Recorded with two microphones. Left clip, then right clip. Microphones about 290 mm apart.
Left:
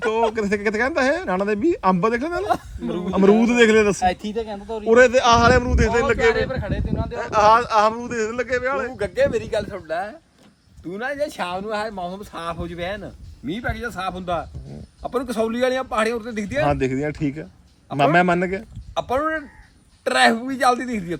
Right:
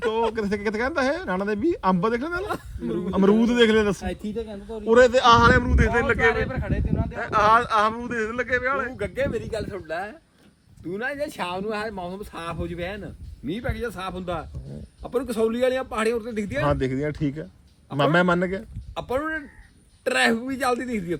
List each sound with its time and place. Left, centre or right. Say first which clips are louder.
0.0 s speech: left 3 dB; centre
4.1 s speech: left 5 dB; centre
4.9 s speech: left 2 dB; centre
6.3 s speech: left 4 dB; left
7.2 s speech: left 3 dB; centre
8.9 s speech: left 6 dB; left
9.5 s speech: left 5 dB; centre